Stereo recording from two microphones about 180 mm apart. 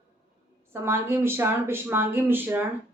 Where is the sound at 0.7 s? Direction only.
15° right (ahead or behind).